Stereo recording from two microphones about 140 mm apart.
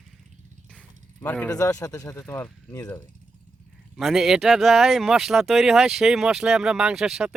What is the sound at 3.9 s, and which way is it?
Speech, centre (ahead or behind).